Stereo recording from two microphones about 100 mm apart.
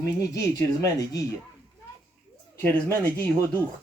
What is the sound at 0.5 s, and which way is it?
Speech, 35° left (ahead or behind).